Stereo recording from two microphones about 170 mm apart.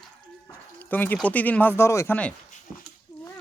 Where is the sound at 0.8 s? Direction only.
10° left (ahead or behind).